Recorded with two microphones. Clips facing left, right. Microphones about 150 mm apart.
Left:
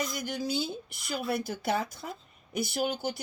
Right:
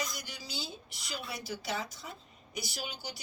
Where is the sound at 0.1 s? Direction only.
55° left (ahead or behind).